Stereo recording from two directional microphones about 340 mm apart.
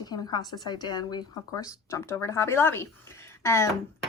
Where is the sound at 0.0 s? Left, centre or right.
Centre.